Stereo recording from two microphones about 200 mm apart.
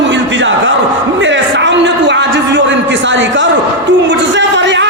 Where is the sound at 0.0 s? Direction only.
65° right (ahead or behind).